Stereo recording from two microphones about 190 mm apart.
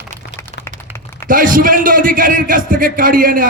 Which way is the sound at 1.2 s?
45° right (ahead or behind).